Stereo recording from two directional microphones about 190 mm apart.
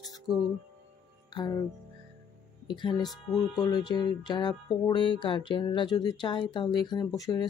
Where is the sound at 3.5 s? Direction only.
20° left (ahead or behind).